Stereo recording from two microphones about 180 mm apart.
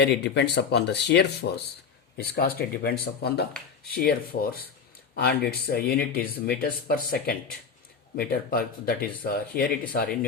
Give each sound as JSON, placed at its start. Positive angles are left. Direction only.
{"t": 0.0, "sound": "speech", "side_deg": 70}